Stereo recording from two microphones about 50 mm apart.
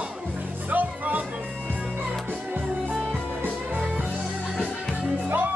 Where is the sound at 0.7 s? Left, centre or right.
Right.